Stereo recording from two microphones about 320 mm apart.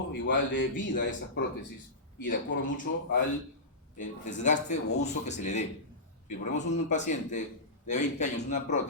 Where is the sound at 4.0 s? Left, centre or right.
Left.